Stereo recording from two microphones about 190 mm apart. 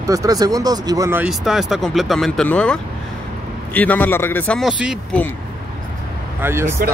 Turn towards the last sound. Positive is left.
turn(degrees=-15)  # may be behind; listen again after turning